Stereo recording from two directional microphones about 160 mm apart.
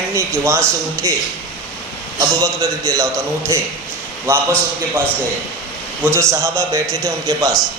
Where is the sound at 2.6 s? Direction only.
20° right (ahead or behind).